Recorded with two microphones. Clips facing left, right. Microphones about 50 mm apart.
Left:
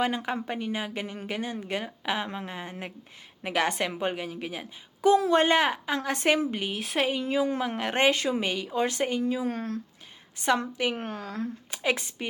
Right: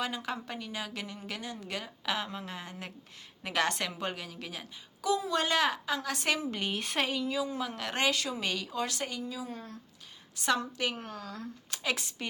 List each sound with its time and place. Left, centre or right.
0.0 s a woman's voice: left
6.6 s speech: centre
7.2 s speech: left
9.2 s speech: left
10.3 s a woman's voice: left
10.9 s speech: left
11.7 s a woman's voice: left